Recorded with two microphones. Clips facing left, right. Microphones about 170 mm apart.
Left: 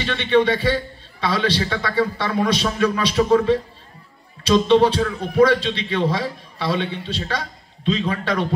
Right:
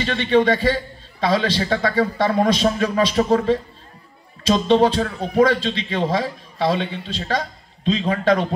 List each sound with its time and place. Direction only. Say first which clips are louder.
0.0 s a man's voice: right 1 dB; 40° right (ahead or behind)